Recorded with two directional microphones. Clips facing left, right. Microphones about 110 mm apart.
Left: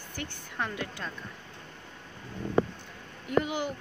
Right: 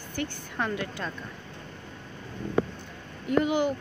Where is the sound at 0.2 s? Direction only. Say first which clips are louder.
Right 4 dB; 65° right (ahead or behind).